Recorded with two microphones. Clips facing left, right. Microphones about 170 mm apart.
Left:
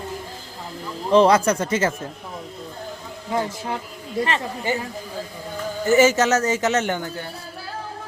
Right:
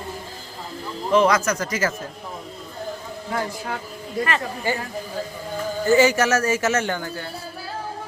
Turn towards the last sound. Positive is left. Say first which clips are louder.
# left 1 dB
turn(degrees=20)  # may be behind; listen again after turning